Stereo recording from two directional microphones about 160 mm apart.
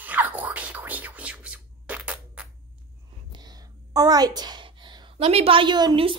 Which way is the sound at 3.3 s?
25° right (ahead or behind).